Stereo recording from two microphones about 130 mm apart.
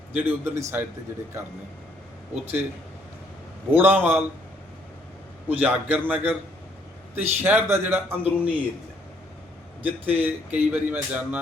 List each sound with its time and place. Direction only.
0.1 s speech: 15° right (ahead or behind)
2.3 s speech: 15° right (ahead or behind)
3.7 s speech: 15° right (ahead or behind)
5.5 s speech: 10° right (ahead or behind)
7.4 s speech: 15° right (ahead or behind)
9.8 s speech: 10° right (ahead or behind)